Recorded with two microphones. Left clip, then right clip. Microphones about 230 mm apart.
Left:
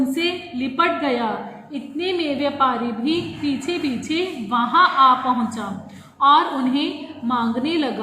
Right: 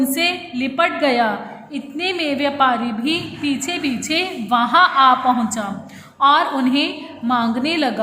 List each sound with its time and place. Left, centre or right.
0.1 s a woman's voice: right
6.1 s a woman's voice: right